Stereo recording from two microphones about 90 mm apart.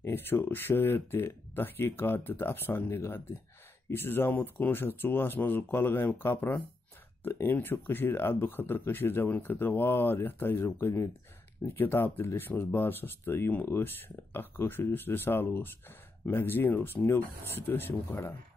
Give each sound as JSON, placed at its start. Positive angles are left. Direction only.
{"t": 0.0, "sound": "speech", "side_deg": 25}